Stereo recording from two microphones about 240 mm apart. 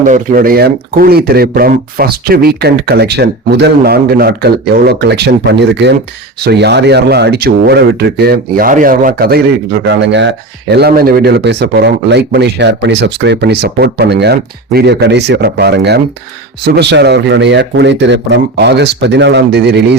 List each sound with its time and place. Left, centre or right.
0.0 s speech: right